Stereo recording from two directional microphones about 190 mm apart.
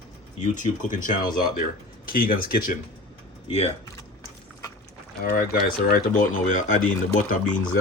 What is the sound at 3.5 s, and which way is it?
Speech, 35° left (ahead or behind).